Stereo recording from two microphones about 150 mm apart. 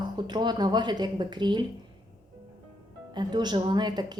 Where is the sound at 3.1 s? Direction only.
30° right (ahead or behind).